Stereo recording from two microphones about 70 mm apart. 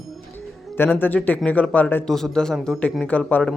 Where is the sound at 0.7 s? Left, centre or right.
Left.